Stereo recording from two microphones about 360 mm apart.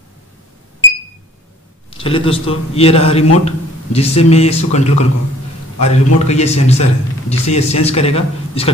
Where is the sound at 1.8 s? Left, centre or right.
Centre.